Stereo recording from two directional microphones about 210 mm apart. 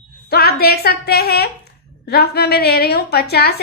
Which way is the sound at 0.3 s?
50° left (ahead or behind).